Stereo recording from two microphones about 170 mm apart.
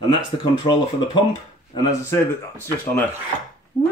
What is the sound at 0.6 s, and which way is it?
Speech, 30° left (ahead or behind).